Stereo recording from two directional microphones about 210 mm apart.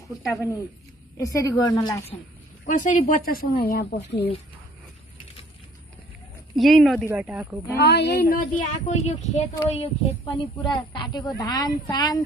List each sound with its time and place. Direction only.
1.1 s a woman's voice: 15° left (ahead or behind)
2.6 s speech: 40° left (ahead or behind)
6.5 s speech: centre (ahead or behind)
7.7 s a woman's voice: 55° left (ahead or behind); by 12.2 s 20° left (ahead or behind)